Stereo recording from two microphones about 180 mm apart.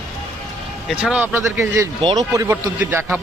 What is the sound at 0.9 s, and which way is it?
Speech, 5° right (ahead or behind).